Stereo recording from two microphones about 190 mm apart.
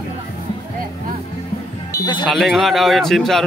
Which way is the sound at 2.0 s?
20° left (ahead or behind).